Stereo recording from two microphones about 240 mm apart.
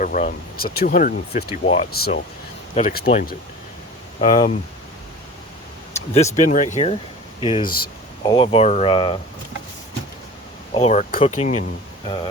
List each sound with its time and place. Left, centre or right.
0.0 s speech: left
1.9 s speech: left
4.2 s speech: left
6.4 s speech: left
10.8 s speech: left